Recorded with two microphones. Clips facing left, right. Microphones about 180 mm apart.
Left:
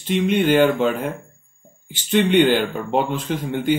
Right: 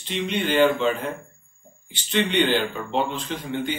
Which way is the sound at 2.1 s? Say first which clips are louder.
Left 6 dB; 50° left (ahead or behind).